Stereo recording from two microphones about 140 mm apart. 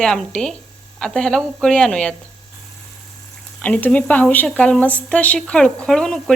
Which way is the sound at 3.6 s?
10° left (ahead or behind).